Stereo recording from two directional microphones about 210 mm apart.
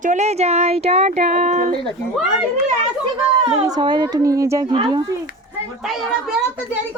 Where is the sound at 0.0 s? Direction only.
35° right (ahead or behind).